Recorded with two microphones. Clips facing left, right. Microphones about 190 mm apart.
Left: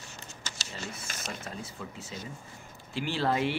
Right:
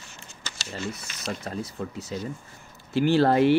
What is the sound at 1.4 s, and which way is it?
Speech, 40° right (ahead or behind).